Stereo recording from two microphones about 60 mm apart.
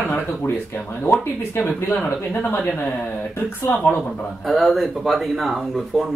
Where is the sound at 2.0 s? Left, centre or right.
Left.